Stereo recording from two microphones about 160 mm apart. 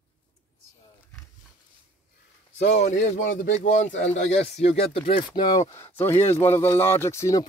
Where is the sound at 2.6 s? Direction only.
45° left (ahead or behind); by 5.7 s 30° left (ahead or behind).